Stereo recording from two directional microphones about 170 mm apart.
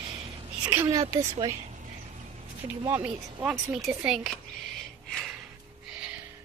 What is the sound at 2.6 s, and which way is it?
Speech, 20° right (ahead or behind).